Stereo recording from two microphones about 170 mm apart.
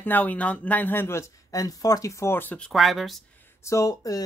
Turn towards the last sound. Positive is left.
turn(degrees=20)  # may be behind; listen again after turning